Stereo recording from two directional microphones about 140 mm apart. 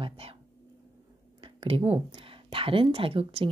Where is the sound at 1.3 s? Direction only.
40° right (ahead or behind).